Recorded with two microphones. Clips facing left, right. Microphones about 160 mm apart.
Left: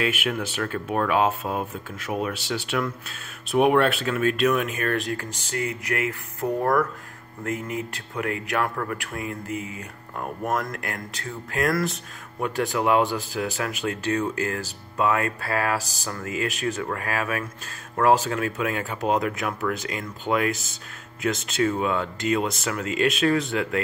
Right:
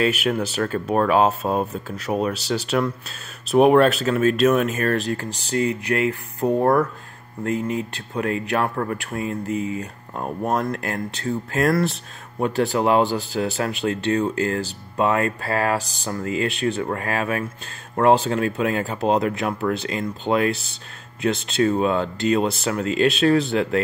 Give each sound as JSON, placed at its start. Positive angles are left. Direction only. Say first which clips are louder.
{"t": 0.0, "sound": "speech", "louder": "right 5 dB", "side_deg": -35}